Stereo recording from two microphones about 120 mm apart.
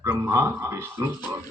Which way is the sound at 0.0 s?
20° right (ahead or behind).